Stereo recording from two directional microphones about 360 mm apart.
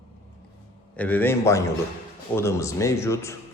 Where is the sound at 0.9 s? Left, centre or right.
Centre.